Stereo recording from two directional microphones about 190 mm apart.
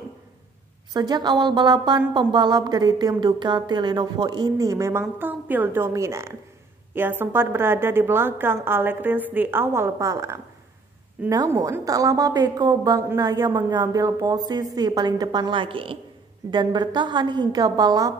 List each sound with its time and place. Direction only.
0.9 s a woman's voice: 20° right (ahead or behind)